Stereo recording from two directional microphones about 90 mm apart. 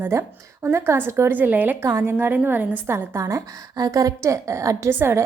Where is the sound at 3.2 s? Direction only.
35° right (ahead or behind).